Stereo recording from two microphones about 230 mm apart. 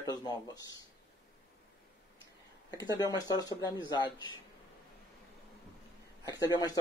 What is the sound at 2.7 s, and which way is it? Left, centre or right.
Speech, centre.